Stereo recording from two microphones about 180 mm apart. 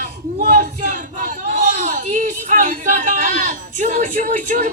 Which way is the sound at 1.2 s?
45° right (ahead or behind).